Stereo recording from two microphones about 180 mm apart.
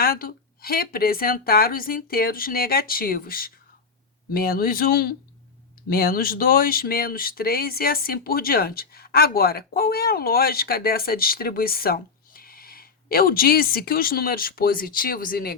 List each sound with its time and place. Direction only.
0.0 s speech: 55° left (ahead or behind)